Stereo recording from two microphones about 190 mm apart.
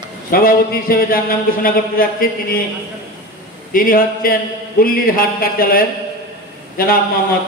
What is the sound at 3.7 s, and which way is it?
Speech, 50° left (ahead or behind).